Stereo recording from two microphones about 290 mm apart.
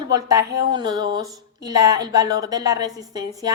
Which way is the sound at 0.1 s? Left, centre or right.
Centre.